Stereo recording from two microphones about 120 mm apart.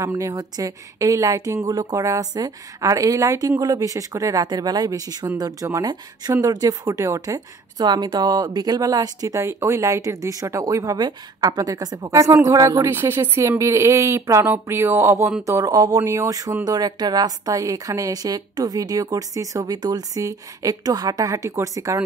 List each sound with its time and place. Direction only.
0.0 s a woman's voice: 25° right (ahead or behind)